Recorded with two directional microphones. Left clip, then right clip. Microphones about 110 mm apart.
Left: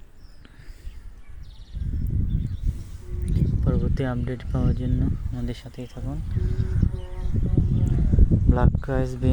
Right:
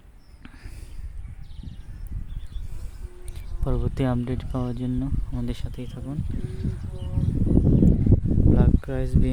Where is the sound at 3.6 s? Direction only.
35° right (ahead or behind).